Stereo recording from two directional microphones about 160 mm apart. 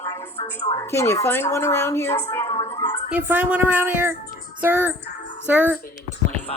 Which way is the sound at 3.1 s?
10° right (ahead or behind).